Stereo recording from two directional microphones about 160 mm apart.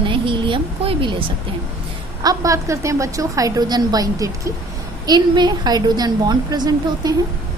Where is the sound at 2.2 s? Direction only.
20° right (ahead or behind).